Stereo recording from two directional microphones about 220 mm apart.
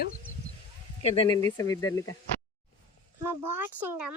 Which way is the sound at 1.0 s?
25° left (ahead or behind).